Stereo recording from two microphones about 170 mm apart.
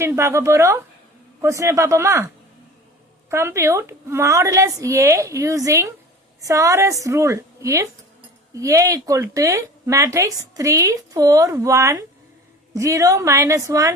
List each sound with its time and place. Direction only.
0.0 s a woman's voice: 15° right (ahead or behind)